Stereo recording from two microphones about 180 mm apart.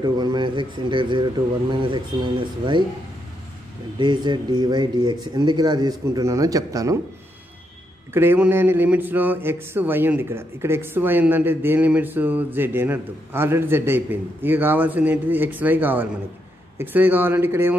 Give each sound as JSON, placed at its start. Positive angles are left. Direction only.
{"t": 0.0, "sound": "speech", "side_deg": -25}
{"t": 4.0, "sound": "speech", "side_deg": -25}
{"t": 8.1, "sound": "speech", "side_deg": -15}